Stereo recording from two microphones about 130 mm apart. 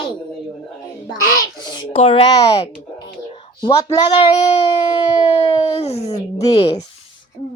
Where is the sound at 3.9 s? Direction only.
35° left (ahead or behind).